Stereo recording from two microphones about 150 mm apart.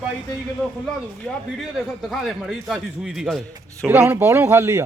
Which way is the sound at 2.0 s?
Centre (ahead or behind).